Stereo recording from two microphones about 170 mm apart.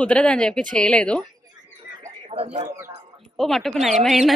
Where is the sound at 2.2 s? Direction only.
35° right (ahead or behind).